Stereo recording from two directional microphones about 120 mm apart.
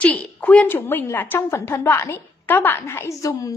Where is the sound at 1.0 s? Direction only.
15° left (ahead or behind).